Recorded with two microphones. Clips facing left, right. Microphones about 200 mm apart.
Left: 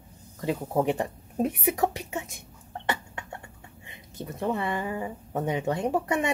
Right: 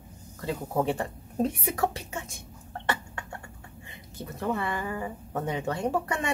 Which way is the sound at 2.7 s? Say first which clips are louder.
Even; 20° left (ahead or behind).